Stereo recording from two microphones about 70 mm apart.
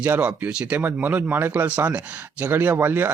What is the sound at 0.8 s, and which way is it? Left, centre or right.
Speech, right.